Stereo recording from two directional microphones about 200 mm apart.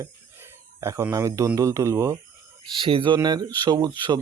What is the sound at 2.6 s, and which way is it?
Speech, 25° right (ahead or behind).